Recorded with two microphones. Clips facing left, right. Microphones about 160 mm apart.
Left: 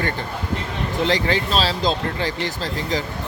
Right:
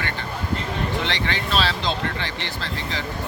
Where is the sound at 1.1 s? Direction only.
35° left (ahead or behind).